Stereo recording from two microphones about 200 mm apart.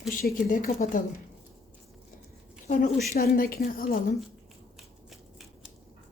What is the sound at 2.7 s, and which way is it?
Speech, 45° left (ahead or behind).